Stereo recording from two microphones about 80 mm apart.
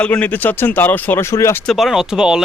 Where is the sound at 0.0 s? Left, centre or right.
Centre; by 1.6 s left.